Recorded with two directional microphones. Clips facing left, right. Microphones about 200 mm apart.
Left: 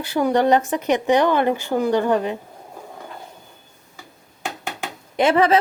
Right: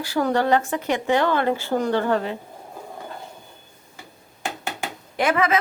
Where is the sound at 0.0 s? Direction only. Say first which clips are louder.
Left 3 dB; 15° left (ahead or behind).